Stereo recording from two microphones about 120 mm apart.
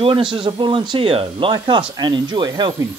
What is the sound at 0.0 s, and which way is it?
Speech, 45° right (ahead or behind).